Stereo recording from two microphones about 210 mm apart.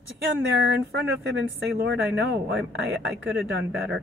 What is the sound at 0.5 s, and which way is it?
Speech, 55° right (ahead or behind).